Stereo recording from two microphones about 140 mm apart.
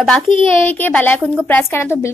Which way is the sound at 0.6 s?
10° left (ahead or behind).